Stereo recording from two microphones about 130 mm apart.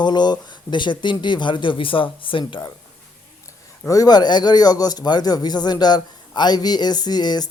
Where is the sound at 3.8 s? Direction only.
25° left (ahead or behind).